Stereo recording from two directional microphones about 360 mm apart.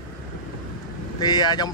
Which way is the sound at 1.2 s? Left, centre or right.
Centre.